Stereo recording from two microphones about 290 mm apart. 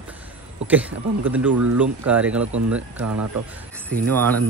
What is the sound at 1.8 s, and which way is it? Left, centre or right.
Speech, centre.